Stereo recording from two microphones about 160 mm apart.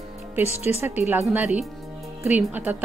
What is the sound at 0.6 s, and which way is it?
A woman's voice, 15° right (ahead or behind).